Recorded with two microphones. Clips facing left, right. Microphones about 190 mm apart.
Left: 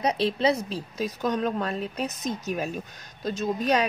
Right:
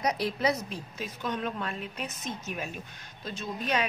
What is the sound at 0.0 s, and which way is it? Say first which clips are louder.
A woman's voice: left 4 dB; 30° left (ahead or behind).